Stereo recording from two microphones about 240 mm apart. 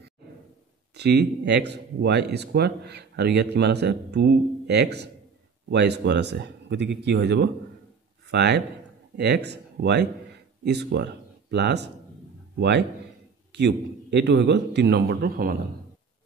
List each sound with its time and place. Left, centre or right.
0.9 s a man's voice: right